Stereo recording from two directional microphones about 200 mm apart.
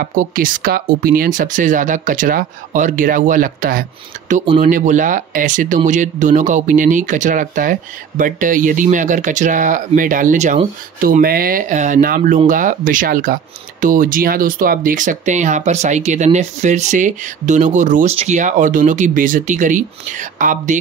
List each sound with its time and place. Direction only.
0.0 s speech: 45° right (ahead or behind)